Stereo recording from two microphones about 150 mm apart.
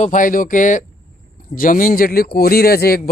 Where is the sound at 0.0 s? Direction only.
60° left (ahead or behind).